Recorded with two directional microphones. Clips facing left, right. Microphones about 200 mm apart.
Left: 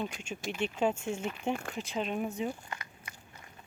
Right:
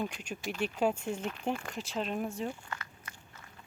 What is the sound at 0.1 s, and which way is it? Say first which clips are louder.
Speech: even; 5° right (ahead or behind).